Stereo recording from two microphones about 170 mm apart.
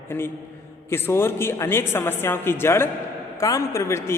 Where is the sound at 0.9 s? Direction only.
15° left (ahead or behind).